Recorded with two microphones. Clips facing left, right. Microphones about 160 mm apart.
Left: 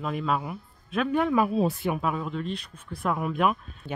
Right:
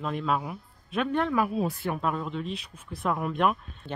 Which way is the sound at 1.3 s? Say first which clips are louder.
Left 3 dB; 25° left (ahead or behind).